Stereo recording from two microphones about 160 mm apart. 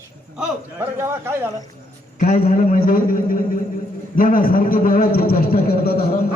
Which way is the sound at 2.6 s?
60° left (ahead or behind).